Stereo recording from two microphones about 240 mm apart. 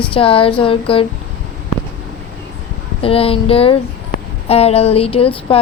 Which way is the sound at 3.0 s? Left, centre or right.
Left.